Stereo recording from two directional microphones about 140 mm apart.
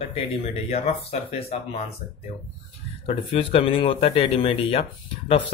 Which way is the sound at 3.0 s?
45° left (ahead or behind).